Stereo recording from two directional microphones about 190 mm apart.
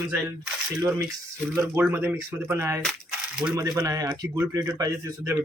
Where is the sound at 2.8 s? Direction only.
5° right (ahead or behind).